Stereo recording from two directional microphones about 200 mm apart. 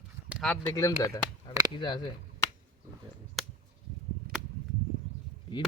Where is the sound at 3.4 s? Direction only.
Centre (ahead or behind).